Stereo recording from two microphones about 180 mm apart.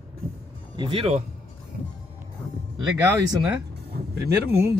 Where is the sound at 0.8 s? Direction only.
30° right (ahead or behind).